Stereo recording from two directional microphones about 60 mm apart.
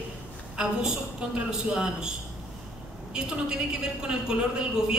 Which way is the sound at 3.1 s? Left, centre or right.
Centre.